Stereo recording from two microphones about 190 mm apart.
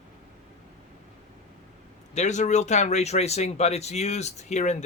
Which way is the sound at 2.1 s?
40° left (ahead or behind).